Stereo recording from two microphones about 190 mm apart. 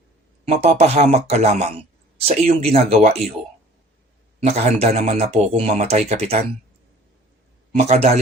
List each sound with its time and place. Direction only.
0.4 s speech: 35° right (ahead or behind)
4.4 s speech: 35° right (ahead or behind)
7.8 s speech: 35° right (ahead or behind)